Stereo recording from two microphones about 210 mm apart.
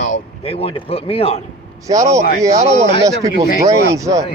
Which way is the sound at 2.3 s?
30° right (ahead or behind).